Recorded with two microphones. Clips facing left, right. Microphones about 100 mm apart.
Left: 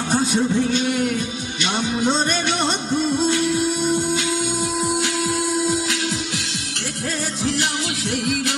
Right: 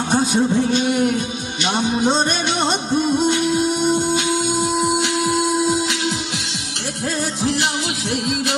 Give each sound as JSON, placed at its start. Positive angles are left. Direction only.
{"t": 0.1, "sound": "a man's voice", "side_deg": -20}
{"t": 2.6, "sound": "music", "side_deg": -20}